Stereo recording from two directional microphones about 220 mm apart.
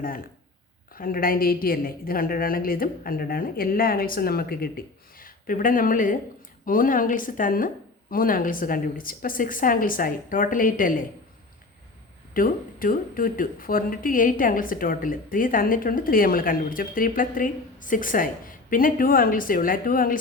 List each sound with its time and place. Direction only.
0.9 s speech: 40° left (ahead or behind)
12.3 s speech: 40° left (ahead or behind)